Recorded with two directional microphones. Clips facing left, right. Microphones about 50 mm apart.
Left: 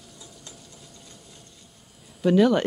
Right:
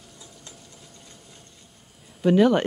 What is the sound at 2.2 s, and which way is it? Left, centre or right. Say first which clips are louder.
Speech: right 1 dB; right.